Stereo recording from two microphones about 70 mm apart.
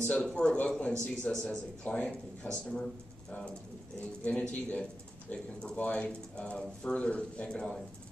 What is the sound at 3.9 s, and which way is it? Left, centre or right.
A man's voice, centre.